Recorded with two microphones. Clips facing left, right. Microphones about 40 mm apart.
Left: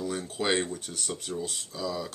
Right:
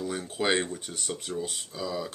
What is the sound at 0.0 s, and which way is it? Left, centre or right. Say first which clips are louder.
Speech: right 1 dB; centre.